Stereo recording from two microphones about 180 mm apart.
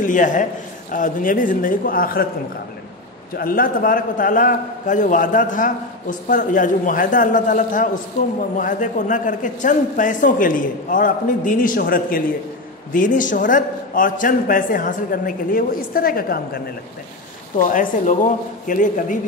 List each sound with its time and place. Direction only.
0.0 s a man's voice: 45° left (ahead or behind)
3.3 s a man's voice: 50° left (ahead or behind)